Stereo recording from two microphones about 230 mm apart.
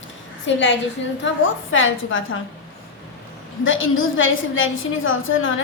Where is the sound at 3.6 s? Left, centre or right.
Left.